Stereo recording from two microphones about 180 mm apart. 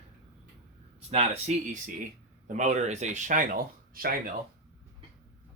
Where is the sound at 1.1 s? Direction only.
35° right (ahead or behind); by 4.4 s 55° right (ahead or behind).